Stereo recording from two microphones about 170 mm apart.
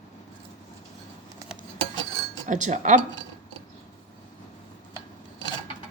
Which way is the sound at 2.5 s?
45° right (ahead or behind).